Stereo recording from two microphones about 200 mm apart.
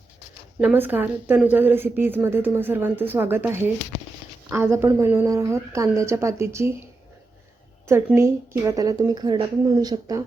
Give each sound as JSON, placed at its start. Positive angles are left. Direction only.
{"t": 0.6, "sound": "a woman's voice", "side_deg": -10}
{"t": 7.9, "sound": "a woman's voice", "side_deg": -15}